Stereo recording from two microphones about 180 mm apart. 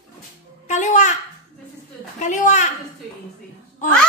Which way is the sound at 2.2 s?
40° left (ahead or behind).